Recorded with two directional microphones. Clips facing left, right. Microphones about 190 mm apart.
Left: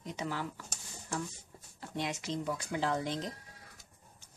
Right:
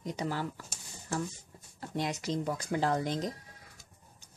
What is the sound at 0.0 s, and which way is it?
Speech, 40° right (ahead or behind).